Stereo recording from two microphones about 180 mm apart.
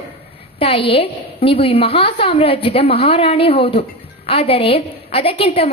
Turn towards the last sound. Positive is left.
turn(degrees=30)  # may be behind; listen again after turning